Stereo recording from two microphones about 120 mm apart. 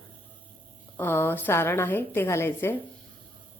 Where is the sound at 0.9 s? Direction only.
20° left (ahead or behind).